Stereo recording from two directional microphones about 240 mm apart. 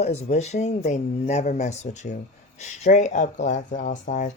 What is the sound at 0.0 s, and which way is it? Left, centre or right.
Speech, left.